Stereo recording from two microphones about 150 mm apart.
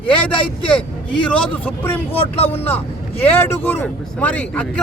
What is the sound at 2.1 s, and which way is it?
Speech, 40° left (ahead or behind).